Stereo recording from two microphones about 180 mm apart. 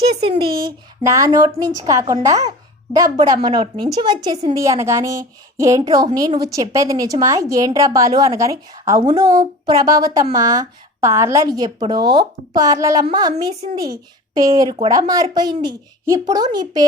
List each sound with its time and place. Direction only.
0.1 s speech: 30° right (ahead or behind)
1.0 s a woman's voice: 20° right (ahead or behind)
14.3 s a woman's voice: 20° right (ahead or behind)